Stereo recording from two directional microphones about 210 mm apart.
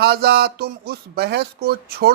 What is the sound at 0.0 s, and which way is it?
Speech, 50° right (ahead or behind).